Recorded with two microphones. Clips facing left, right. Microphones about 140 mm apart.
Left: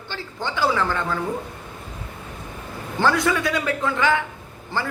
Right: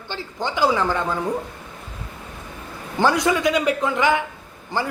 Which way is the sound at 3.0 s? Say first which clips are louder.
Right 2 dB; 20° right (ahead or behind).